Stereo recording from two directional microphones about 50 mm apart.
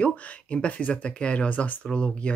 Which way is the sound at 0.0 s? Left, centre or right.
Left.